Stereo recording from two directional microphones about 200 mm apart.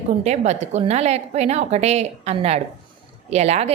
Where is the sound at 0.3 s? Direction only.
35° right (ahead or behind).